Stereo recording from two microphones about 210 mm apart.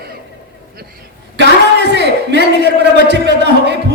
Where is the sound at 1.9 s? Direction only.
55° right (ahead or behind).